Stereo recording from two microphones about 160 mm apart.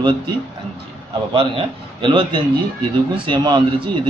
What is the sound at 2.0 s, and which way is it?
A man's voice, 30° right (ahead or behind).